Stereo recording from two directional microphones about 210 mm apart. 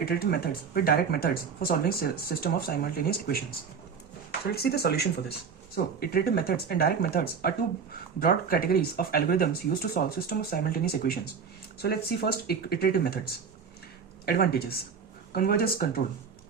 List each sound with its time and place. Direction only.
0.0 s speech: 45° left (ahead or behind)